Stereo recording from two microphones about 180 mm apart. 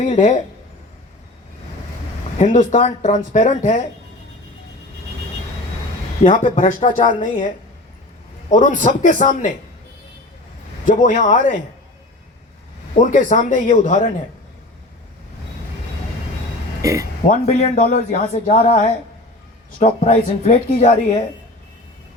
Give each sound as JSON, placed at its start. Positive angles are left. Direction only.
{"t": 0.0, "sound": "speech", "side_deg": 45}
{"t": 2.4, "sound": "speech", "side_deg": 45}
{"t": 6.2, "sound": "speech", "side_deg": 40}
{"t": 10.8, "sound": "speech", "side_deg": 45}
{"t": 13.0, "sound": "speech", "side_deg": 45}
{"t": 16.8, "sound": "speech", "side_deg": -20}
{"t": 17.2, "sound": "speech", "side_deg": 40}